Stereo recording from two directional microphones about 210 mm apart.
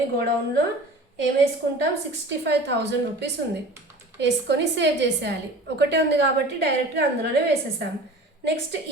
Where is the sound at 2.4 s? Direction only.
55° right (ahead or behind).